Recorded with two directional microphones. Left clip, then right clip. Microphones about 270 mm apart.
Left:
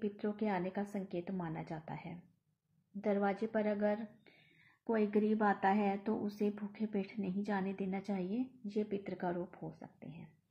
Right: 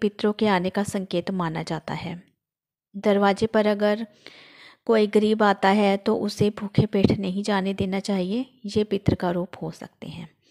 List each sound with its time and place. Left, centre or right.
0.0 s speech: right